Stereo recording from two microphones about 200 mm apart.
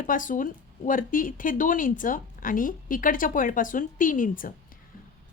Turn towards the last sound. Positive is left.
turn(degrees=40)  # may be behind; listen again after turning